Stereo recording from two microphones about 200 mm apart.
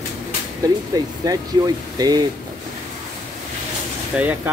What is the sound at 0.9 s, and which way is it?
Speech, 20° right (ahead or behind).